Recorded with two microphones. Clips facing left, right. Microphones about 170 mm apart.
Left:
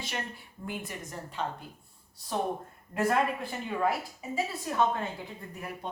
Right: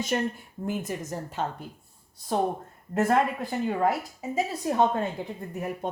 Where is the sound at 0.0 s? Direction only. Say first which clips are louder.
Right 10 dB; 45° right (ahead or behind).